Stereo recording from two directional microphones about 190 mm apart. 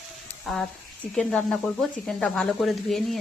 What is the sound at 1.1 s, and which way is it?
Speech, 5° left (ahead or behind).